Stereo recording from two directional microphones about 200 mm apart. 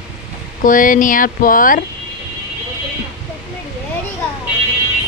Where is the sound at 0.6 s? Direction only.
40° left (ahead or behind).